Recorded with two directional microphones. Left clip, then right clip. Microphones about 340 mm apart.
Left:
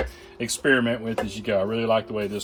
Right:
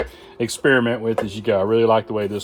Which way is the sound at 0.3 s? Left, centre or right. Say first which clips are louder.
Right 4 dB; right.